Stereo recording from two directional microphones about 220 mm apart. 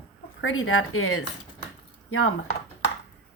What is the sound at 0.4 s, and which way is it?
Speech, 65° left (ahead or behind).